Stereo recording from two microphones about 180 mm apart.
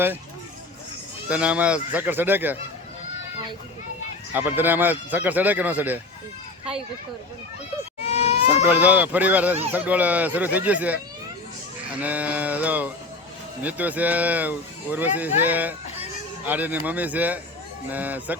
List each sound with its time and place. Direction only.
1.3 s speech: 5° right (ahead or behind)
4.4 s speech: 10° right (ahead or behind)
8.0 s baby cry: 35° left (ahead or behind)
8.6 s speech: 10° right (ahead or behind)